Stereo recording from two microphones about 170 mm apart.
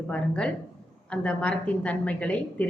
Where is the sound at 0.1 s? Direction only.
5° left (ahead or behind).